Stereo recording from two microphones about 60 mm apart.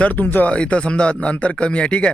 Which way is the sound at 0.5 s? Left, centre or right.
Centre.